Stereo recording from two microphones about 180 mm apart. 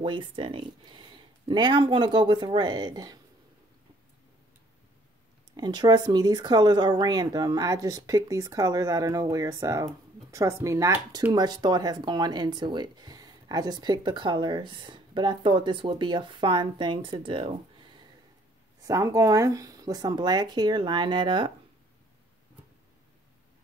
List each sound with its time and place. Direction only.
0.0 s speech: 30° right (ahead or behind)
5.6 s speech: 25° right (ahead or behind)